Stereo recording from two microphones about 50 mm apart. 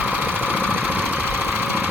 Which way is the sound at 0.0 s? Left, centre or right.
Right.